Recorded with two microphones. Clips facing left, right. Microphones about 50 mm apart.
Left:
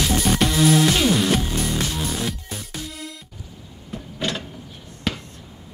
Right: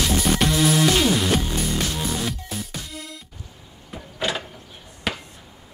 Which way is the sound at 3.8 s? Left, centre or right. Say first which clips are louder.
Even; centre.